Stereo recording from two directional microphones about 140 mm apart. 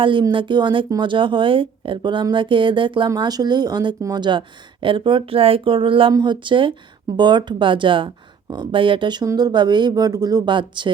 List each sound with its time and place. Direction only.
0.0 s speech: 35° right (ahead or behind)